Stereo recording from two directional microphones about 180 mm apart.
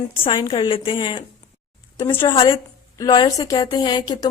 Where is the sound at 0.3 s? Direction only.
25° left (ahead or behind).